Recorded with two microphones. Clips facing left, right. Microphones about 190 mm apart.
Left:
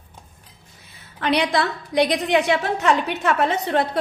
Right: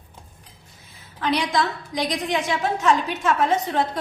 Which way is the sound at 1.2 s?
65° left (ahead or behind).